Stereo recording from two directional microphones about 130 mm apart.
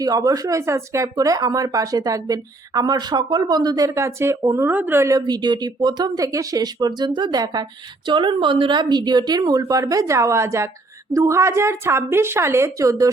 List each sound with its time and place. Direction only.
0.0 s speech: 25° right (ahead or behind)
5.2 s a woman's voice: 35° right (ahead or behind)